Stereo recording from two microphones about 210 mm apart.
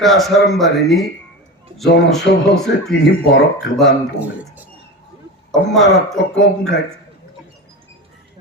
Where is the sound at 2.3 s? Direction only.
55° left (ahead or behind).